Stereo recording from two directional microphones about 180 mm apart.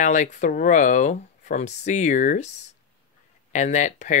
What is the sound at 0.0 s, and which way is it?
Speech, 45° left (ahead or behind).